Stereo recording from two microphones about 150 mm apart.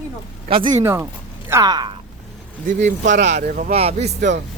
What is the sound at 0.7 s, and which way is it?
A man's voice, 15° right (ahead or behind).